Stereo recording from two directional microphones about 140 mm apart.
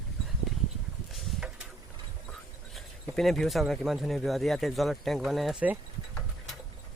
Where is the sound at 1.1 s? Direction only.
5° right (ahead or behind).